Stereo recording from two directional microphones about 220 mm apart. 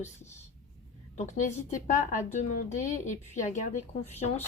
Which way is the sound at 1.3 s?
35° left (ahead or behind).